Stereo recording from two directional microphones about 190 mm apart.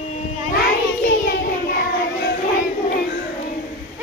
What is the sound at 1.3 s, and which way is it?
Child singing, 55° left (ahead or behind).